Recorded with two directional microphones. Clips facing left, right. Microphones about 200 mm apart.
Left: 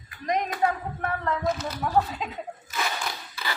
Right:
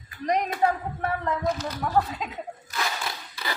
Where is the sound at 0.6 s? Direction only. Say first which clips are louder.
Right 2 dB; 30° right (ahead or behind).